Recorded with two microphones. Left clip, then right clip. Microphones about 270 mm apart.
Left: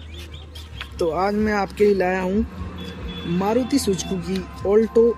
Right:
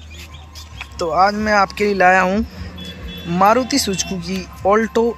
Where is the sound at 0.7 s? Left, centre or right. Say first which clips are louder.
Right 6 dB; centre.